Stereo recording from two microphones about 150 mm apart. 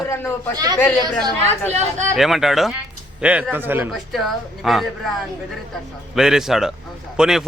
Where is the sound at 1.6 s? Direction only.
50° right (ahead or behind).